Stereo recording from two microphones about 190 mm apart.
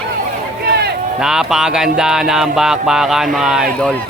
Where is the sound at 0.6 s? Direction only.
55° right (ahead or behind).